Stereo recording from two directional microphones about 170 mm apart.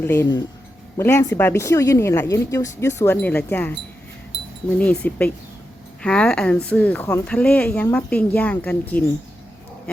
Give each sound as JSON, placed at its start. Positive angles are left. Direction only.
{"t": 0.0, "sound": "speech", "side_deg": 15}
{"t": 4.8, "sound": "speech", "side_deg": 10}